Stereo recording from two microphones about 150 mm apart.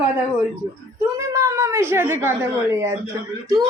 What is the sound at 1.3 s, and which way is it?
A woman's voice, 20° right (ahead or behind).